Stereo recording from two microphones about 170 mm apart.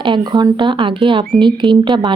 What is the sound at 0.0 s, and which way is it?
Speech, 25° right (ahead or behind).